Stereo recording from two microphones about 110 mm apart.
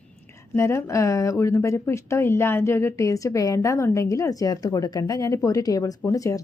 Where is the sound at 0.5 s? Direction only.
25° left (ahead or behind).